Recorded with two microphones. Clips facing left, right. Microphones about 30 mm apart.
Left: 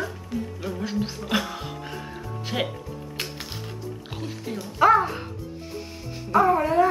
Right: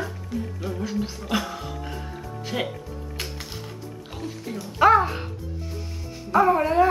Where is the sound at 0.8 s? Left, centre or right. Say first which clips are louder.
Left 1 dB; centre.